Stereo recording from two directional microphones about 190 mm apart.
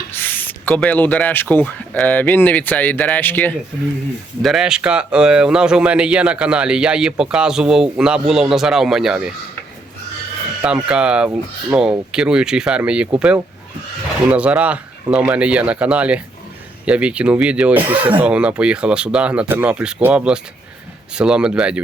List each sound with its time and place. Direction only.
0.1 s speech: 10° left (ahead or behind)
4.4 s speech: centre (ahead or behind)
10.6 s speech: 5° right (ahead or behind)
17.8 s speech: 30° right (ahead or behind)
18.2 s speech: 5° right (ahead or behind)